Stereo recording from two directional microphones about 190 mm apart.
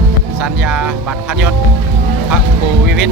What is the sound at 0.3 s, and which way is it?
Speech, 5° right (ahead or behind).